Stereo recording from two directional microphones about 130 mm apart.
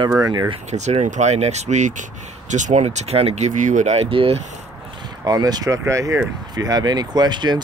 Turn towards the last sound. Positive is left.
turn(degrees=-35)  # may be behind; listen again after turning